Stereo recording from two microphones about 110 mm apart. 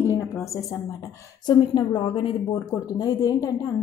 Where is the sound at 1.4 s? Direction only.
40° left (ahead or behind).